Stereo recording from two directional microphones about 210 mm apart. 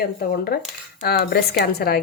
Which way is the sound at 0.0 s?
45° left (ahead or behind).